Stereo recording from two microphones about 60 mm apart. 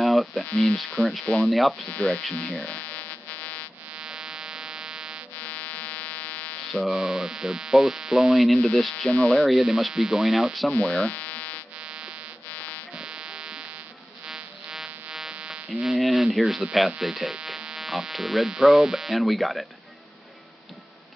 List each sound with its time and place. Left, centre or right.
0.0 s a sound: centre
1.0 s speech: centre
1.9 s speech: left
2.6 s buzzer: left
3.9 s a sound: centre
5.4 s fire alarm: left
6.7 s speech: centre
10.7 s electric shaver: left
12.5 s fire alarm: left
12.9 s buzzer: centre
14.2 s frog: centre
15.7 s a sound: centre
16.7 s speech: centre